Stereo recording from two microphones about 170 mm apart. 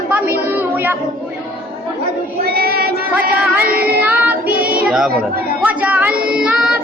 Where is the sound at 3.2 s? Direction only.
10° right (ahead or behind).